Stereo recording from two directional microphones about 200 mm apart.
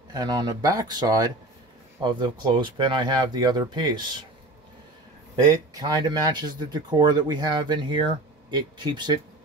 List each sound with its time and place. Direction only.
0.1 s speech: 20° right (ahead or behind)
5.8 s speech: 20° right (ahead or behind)